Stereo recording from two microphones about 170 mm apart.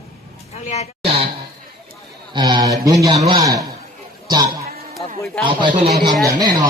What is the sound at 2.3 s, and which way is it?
Speech, 25° right (ahead or behind).